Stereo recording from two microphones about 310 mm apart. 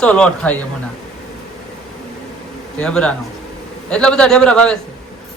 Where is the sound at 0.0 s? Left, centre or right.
Centre.